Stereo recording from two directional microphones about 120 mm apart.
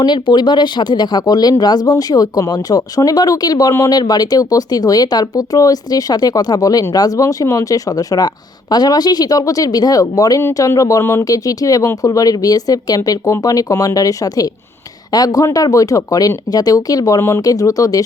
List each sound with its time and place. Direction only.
0.0 s speech: 40° left (ahead or behind)